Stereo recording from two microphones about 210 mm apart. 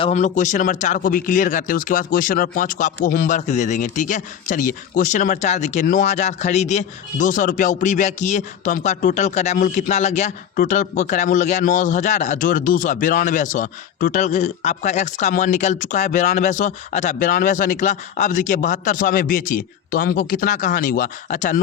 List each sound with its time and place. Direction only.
0.0 s speech: 35° left (ahead or behind)